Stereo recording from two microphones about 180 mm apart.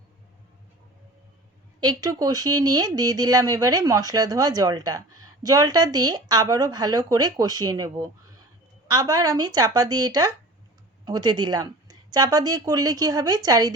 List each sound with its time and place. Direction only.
1.8 s speech: 20° right (ahead or behind)